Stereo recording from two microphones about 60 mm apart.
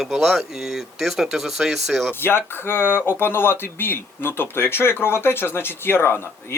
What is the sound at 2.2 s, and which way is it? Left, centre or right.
Speech, left.